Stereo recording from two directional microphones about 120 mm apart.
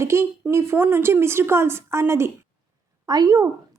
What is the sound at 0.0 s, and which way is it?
A woman's voice, 20° right (ahead or behind).